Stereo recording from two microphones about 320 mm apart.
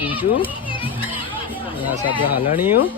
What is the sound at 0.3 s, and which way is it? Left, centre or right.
Speech, centre.